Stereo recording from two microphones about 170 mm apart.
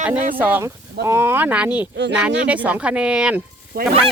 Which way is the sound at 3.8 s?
60° right (ahead or behind).